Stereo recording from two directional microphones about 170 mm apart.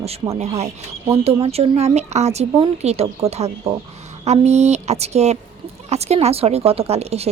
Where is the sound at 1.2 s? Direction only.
35° right (ahead or behind).